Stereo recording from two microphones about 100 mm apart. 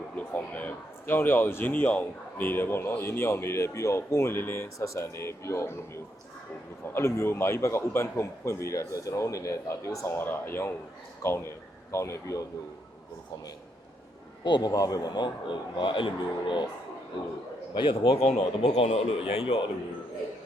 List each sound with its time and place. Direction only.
0.2 s speech: 15° left (ahead or behind)
6.8 s speech: 25° left (ahead or behind)
14.4 s speech: 50° left (ahead or behind)
14.7 s speech: 35° left (ahead or behind); by 16.6 s 55° left (ahead or behind)
17.7 s a man's voice: 55° left (ahead or behind)